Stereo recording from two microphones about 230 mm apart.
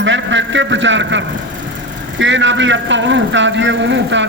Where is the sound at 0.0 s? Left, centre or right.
Right.